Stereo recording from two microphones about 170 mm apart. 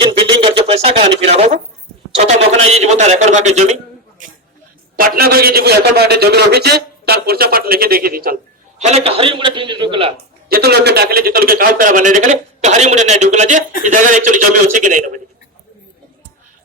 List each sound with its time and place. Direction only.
0.0 s a sound: 30° right (ahead or behind)
2.2 s speech: 40° right (ahead or behind)
4.9 s a man's voice: 60° right (ahead or behind)
8.8 s speech: 35° right (ahead or behind)
10.5 s a man's voice: 70° right (ahead or behind); by 15.2 s 50° right (ahead or behind)